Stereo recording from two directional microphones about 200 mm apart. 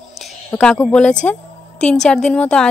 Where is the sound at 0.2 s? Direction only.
5° left (ahead or behind).